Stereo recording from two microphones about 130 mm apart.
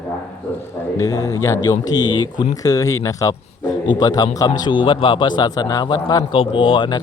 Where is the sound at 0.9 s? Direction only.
25° left (ahead or behind).